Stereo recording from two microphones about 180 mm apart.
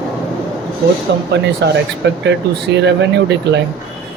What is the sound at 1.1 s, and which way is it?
Speech, 70° right (ahead or behind).